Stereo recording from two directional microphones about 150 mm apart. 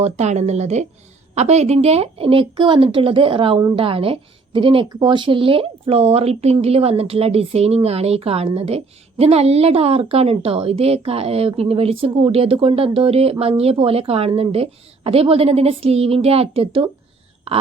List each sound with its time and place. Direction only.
0.0 s a woman's voice: 50° right (ahead or behind)